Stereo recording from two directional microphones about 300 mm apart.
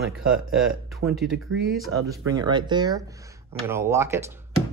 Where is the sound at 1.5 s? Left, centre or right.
Right.